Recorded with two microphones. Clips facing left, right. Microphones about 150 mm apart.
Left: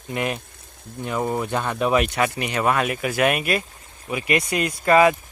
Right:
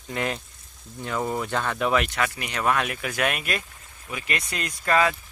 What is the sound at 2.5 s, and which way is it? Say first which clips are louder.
Speech: left 3 dB; 5° left (ahead or behind).